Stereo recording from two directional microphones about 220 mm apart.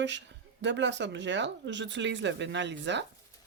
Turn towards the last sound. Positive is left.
turn(degrees=-55)  # may be behind; listen again after turning